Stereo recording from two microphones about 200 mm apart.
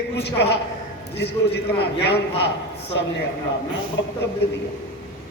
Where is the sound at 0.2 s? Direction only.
55° left (ahead or behind).